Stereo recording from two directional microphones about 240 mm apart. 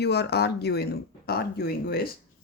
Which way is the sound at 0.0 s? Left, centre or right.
Left.